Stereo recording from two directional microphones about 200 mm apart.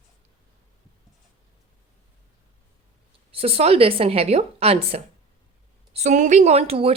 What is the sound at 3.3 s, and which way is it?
Speech, 30° right (ahead or behind).